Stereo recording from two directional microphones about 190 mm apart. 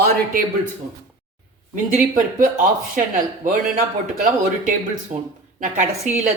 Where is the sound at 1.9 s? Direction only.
45° right (ahead or behind).